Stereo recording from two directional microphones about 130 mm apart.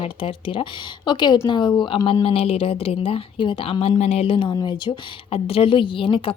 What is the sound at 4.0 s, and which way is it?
A woman's voice, 55° left (ahead or behind).